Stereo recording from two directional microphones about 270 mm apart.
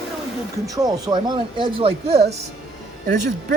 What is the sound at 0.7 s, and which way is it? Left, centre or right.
Speech, centre.